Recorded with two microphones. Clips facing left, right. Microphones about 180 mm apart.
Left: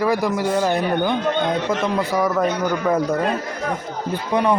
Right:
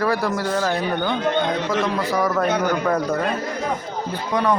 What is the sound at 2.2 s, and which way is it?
Speech, 10° left (ahead or behind).